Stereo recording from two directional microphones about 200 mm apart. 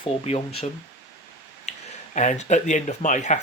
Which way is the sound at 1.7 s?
35° left (ahead or behind).